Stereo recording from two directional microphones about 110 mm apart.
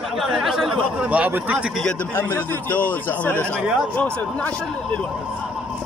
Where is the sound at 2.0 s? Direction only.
20° left (ahead or behind).